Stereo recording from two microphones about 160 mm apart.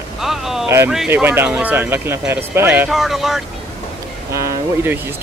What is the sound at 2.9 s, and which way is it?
Speech, centre (ahead or behind).